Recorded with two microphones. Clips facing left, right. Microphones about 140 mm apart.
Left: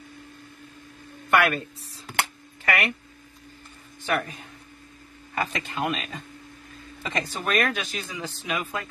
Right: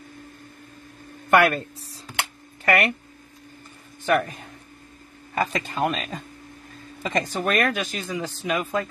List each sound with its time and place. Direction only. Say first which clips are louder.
1.3 s speech: right 4 dB; 40° right (ahead or behind)
4.0 s speech: right 5 dB; 45° right (ahead or behind)